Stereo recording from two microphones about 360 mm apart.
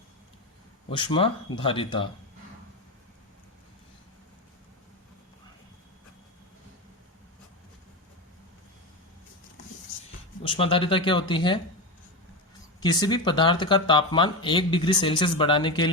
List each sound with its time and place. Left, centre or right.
0.9 s speech: centre
10.4 s speech: centre
12.8 s speech: centre